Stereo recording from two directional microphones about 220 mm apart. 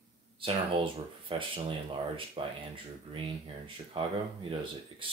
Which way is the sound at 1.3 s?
25° right (ahead or behind).